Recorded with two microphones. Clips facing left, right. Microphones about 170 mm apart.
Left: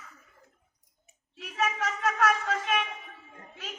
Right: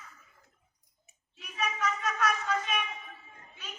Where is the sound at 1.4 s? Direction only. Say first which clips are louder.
Left 4 dB; 85° left.